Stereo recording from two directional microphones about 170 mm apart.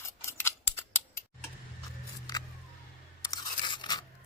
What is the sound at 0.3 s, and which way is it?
Scissors, 15° left (ahead or behind).